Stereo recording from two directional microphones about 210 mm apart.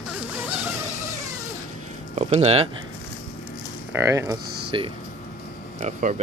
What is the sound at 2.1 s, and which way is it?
Speech, 30° right (ahead or behind).